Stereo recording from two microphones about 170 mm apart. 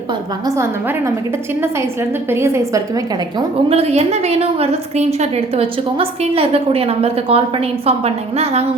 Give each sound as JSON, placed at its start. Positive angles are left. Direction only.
{"t": 0.1, "sound": "a woman's voice", "side_deg": -20}
{"t": 3.7, "sound": "a woman's voice", "side_deg": -35}